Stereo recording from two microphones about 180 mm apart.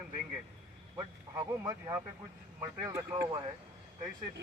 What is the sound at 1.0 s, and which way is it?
Speech, 20° right (ahead or behind).